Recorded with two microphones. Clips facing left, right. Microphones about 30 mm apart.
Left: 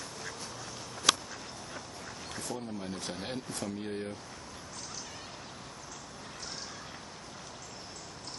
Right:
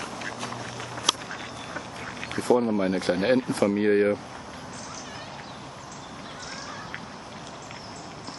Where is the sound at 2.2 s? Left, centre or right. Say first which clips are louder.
Right 18 dB; right.